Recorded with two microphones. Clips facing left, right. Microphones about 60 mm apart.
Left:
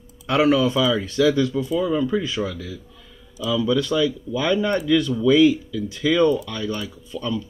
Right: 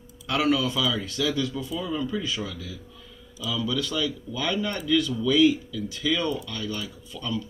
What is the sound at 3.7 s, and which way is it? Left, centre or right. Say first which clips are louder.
Speech: left 8 dB; left.